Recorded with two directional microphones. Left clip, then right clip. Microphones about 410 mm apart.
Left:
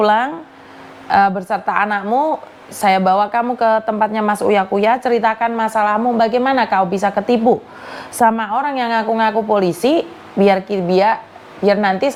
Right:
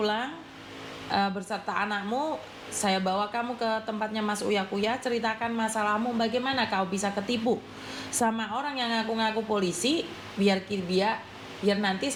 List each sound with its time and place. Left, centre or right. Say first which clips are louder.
0.0 s a woman's voice: left 15 dB; left